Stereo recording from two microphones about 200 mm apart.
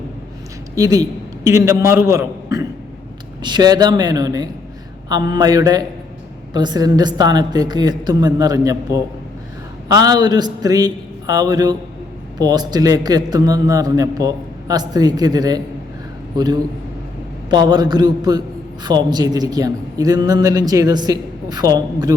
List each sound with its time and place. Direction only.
0.8 s a woman's voice: 20° right (ahead or behind)
17.5 s a woman's voice: 20° right (ahead or behind)